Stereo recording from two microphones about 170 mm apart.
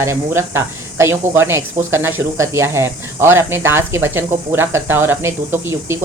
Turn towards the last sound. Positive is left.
turn(degrees=-15)  # may be behind; listen again after turning